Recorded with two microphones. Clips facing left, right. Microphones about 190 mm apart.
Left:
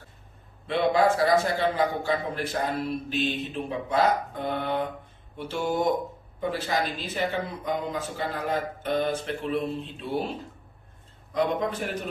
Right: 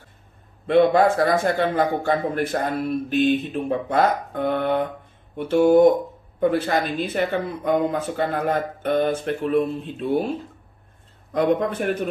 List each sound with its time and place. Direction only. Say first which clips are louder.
0.7 s a man's voice: right 6 dB; 55° right (ahead or behind)
11.3 s speech: right 6 dB; 55° right (ahead or behind)